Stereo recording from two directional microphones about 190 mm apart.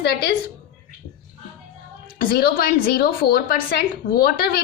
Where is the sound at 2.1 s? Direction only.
55° left (ahead or behind).